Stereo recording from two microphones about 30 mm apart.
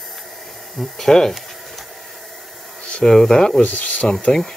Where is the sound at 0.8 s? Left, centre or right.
Centre.